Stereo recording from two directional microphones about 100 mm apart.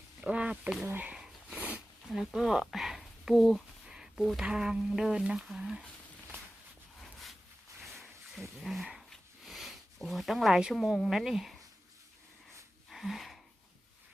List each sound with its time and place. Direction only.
0.2 s speech: 10° right (ahead or behind)
1.1 s a sound: 10° right (ahead or behind)
2.1 s speech: 5° right (ahead or behind)
7.0 s a sound: centre (ahead or behind)
8.4 s speech: centre (ahead or behind)
12.9 s wheeze: centre (ahead or behind)